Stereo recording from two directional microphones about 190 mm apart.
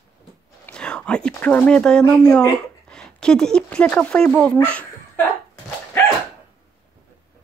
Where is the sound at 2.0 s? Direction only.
15° left (ahead or behind).